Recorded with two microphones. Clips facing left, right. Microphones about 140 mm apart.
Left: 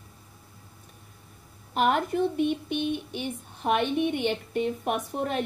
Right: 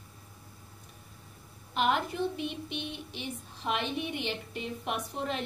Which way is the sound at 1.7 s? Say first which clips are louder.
Left 5 dB; 45° left (ahead or behind).